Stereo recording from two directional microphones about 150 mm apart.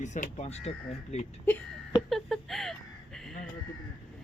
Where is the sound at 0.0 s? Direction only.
55° left (ahead or behind).